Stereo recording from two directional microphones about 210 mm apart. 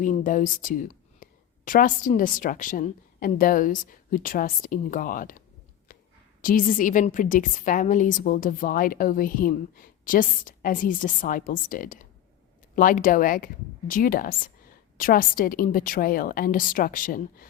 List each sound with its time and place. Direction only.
0.0 s a woman's voice: 40° left (ahead or behind)
6.4 s a woman's voice: 40° left (ahead or behind)